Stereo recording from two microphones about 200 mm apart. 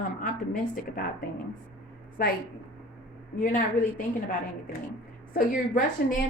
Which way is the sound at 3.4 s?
45° left (ahead or behind).